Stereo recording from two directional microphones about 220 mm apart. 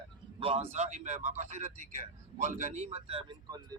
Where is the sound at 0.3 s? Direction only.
25° right (ahead or behind).